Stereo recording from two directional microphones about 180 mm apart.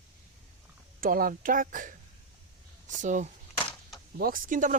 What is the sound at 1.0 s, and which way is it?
Speech, 50° right (ahead or behind).